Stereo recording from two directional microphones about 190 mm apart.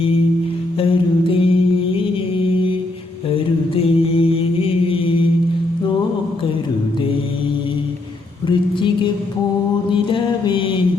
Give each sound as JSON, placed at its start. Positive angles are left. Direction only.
{"t": 0.8, "sound": "mantra", "side_deg": 30}
{"t": 3.8, "sound": "mantra", "side_deg": 30}
{"t": 8.4, "sound": "a sound", "side_deg": 25}
{"t": 9.9, "sound": "mantra", "side_deg": 25}